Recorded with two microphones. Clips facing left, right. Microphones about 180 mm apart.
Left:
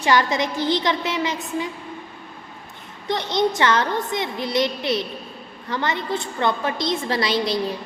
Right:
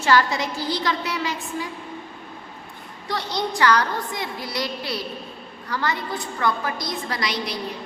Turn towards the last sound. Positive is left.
turn(degrees=25)  # may be behind; listen again after turning